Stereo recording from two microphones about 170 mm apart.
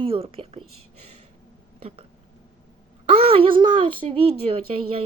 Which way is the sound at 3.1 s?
35° right (ahead or behind).